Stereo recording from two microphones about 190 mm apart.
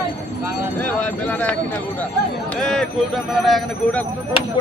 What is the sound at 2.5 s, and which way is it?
A man's voice, centre (ahead or behind).